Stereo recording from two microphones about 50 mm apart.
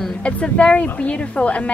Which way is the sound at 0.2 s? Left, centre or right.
Left.